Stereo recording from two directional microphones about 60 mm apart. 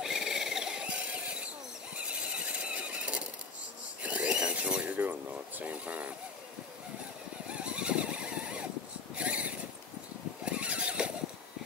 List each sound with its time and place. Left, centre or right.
0.0 s a sound: centre
2.0 s squeal: centre
5.6 s mechanisms: right
7.5 s vehicle: centre
9.1 s a sound: right
10.4 s vehicle: centre